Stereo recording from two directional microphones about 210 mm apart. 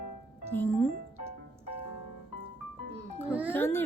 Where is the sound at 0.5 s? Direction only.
5° left (ahead or behind).